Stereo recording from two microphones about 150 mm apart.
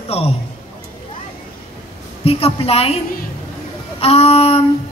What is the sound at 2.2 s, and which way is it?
Speech, 40° left (ahead or behind).